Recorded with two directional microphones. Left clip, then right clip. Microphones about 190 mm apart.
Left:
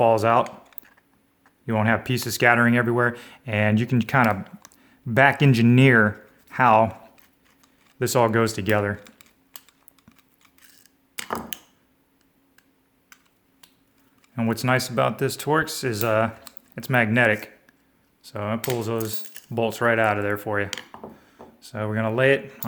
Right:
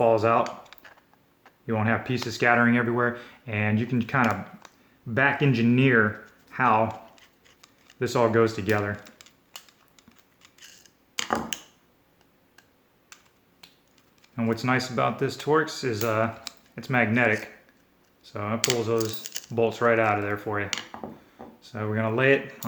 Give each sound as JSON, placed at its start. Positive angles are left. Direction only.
{"t": 0.0, "sound": "speech", "side_deg": 55}
{"t": 1.6, "sound": "speech", "side_deg": 60}
{"t": 7.9, "sound": "speech", "side_deg": 55}
{"t": 10.6, "sound": "a sound", "side_deg": 10}
{"t": 14.3, "sound": "speech", "side_deg": 50}